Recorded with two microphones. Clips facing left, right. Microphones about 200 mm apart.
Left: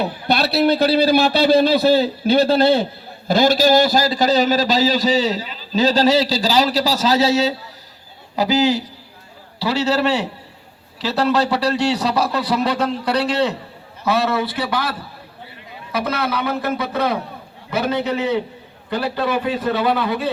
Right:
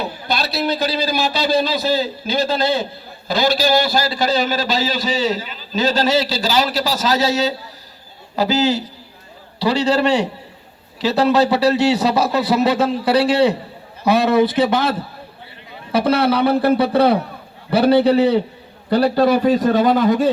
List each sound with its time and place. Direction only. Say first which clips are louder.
0.3 s a man's voice: left 5 dB; 60° left (ahead or behind); by 7.5 s 25° left (ahead or behind)
8.4 s a man's voice: even; 15° left (ahead or behind); by 20.3 s 45° right (ahead or behind)